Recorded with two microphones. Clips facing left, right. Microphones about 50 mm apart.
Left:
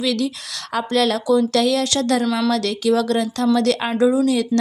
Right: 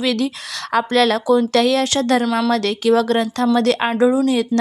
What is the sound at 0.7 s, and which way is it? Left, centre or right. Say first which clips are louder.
Speech: right 3 dB; right.